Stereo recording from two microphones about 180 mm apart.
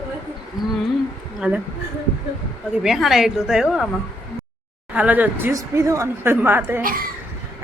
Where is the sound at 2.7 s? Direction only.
Centre (ahead or behind).